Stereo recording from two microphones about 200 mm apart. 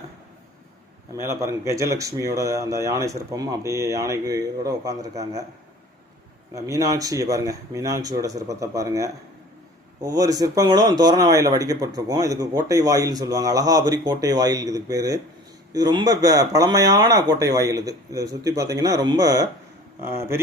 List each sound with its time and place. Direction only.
1.2 s speech: 15° right (ahead or behind)
6.5 s speech: 15° right (ahead or behind)